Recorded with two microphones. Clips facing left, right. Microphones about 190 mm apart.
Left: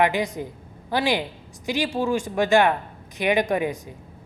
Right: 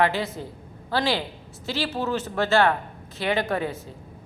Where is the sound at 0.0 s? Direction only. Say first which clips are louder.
Left 2 dB; 15° left (ahead or behind).